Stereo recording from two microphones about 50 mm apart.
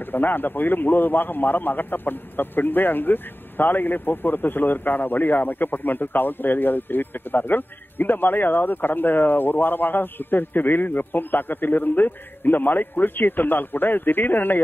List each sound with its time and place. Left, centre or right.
0.1 s a man's voice: left